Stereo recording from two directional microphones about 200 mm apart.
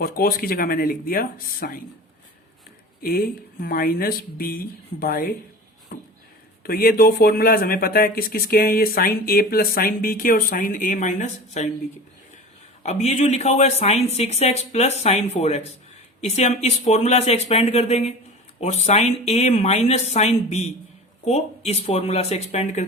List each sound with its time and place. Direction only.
0.0 s speech: 45° left (ahead or behind)
3.0 s speech: 45° left (ahead or behind)
12.8 s speech: 35° left (ahead or behind)